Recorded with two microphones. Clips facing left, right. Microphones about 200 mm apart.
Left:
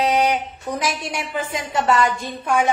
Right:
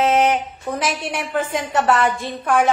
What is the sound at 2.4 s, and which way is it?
Speech, 50° right (ahead or behind).